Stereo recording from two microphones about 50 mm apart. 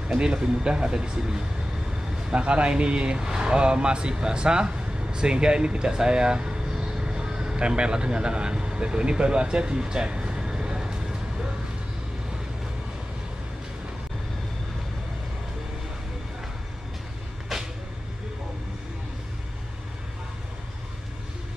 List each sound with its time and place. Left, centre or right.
0.1 s speech: centre
17.5 s vehicle: centre